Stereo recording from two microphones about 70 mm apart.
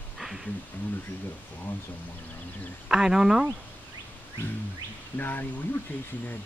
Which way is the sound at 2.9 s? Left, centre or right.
Centre.